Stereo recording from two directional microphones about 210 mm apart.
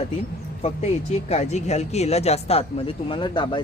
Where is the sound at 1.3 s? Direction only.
30° left (ahead or behind).